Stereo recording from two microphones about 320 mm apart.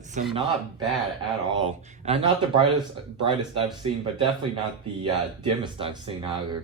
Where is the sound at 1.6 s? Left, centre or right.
Centre.